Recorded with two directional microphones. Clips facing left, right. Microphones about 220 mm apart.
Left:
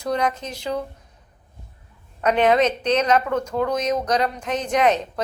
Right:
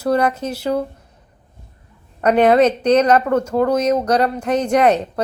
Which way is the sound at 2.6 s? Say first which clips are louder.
Right 6 dB; 10° right (ahead or behind).